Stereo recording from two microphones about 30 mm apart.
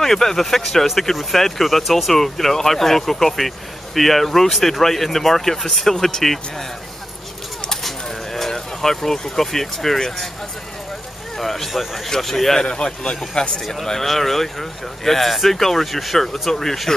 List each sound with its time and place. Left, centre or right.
0.0 s speech: centre
2.1 s speech: centre
7.8 s bird: centre
11.3 s speech: centre
12.6 s a man's voice: left
14.0 s speech: centre